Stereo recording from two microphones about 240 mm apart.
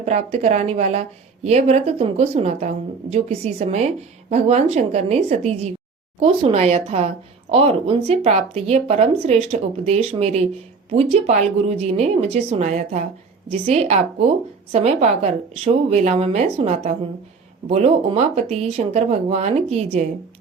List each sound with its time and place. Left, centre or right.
0.0 s a woman's voice: right